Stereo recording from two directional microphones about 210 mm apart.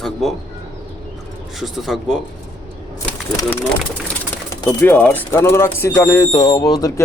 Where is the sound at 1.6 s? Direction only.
Centre (ahead or behind).